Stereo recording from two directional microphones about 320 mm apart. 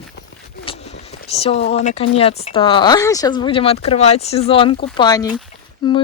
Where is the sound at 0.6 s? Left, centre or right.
Centre.